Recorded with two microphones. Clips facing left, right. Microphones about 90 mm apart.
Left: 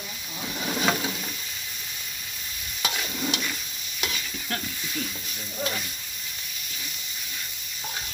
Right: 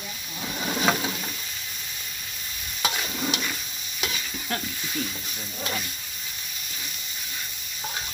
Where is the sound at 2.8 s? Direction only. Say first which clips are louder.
Right 3 dB; 20° right (ahead or behind).